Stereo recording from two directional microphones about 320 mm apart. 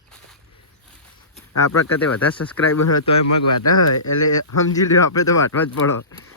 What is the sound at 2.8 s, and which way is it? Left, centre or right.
Speech, left.